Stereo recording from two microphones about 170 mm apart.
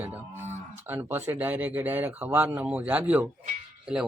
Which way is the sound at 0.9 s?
10° right (ahead or behind).